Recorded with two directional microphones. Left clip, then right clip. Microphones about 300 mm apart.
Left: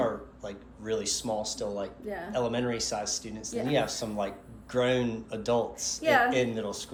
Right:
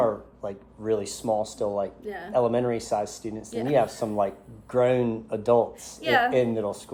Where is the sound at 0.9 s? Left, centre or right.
Right.